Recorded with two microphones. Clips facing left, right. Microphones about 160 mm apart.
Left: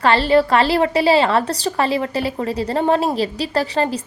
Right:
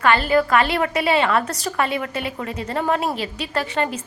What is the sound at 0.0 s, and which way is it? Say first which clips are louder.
A woman's voice: left 3 dB; 30° left (ahead or behind).